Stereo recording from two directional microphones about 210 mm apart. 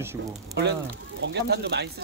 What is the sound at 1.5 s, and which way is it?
Speech, 55° right (ahead or behind).